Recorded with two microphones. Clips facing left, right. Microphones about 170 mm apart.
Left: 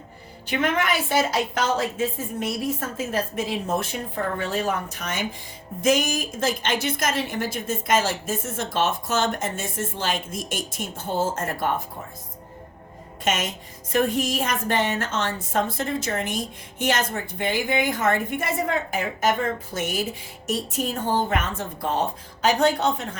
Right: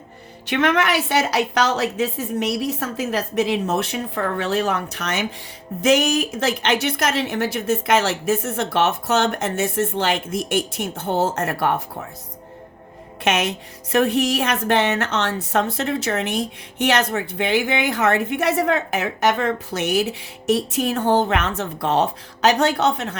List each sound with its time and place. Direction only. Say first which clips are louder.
0.4 s a woman's voice: right 4 dB; 80° right
13.2 s a woman's voice: right 5 dB; 75° right (ahead or behind)